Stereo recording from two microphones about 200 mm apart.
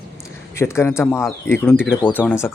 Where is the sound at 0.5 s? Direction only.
15° left (ahead or behind).